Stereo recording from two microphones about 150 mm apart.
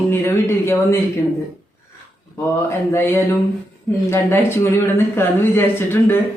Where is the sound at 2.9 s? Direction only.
15° left (ahead or behind).